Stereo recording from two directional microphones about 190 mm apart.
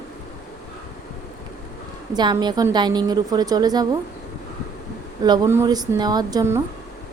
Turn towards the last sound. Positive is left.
turn(degrees=-15)  # may be behind; listen again after turning